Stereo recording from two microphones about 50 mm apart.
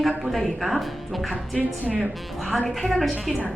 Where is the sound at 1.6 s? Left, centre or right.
Right.